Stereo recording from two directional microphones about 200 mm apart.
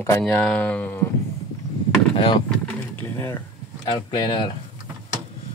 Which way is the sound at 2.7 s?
10° left (ahead or behind).